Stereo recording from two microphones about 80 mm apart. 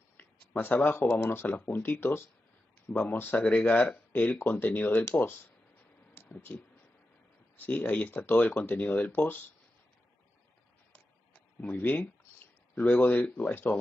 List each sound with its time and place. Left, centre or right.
0.6 s speech: left
6.5 s speech: left
11.6 s speech: left